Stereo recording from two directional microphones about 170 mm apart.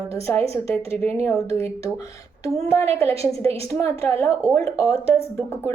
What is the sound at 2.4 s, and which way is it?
A woman's voice, 15° left (ahead or behind).